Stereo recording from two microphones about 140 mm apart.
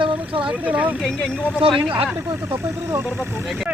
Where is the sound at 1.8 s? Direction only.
40° right (ahead or behind).